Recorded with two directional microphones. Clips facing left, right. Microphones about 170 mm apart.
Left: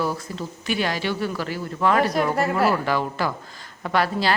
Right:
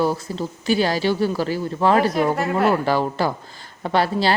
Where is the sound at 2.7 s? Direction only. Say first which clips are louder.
Right 3 dB; 30° right (ahead or behind).